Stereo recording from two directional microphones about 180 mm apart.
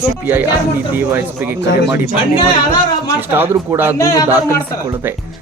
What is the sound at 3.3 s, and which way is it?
Speech, 15° right (ahead or behind).